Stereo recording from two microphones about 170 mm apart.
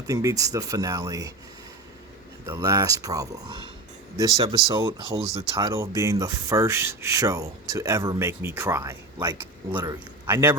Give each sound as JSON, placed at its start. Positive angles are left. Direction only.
{"t": 0.1, "sound": "speech", "side_deg": -20}
{"t": 2.5, "sound": "speech", "side_deg": -20}
{"t": 9.4, "sound": "speech", "side_deg": -15}